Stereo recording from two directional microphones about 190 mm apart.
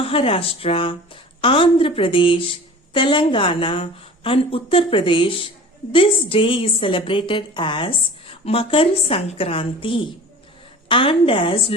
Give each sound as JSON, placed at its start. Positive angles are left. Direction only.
{"t": 0.0, "sound": "a woman's voice", "side_deg": 30}